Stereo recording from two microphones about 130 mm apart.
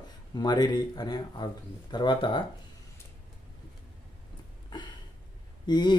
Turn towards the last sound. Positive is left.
turn(degrees=35)  # may be behind; listen again after turning